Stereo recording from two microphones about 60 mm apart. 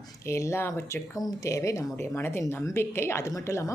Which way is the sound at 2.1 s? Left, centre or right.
Left.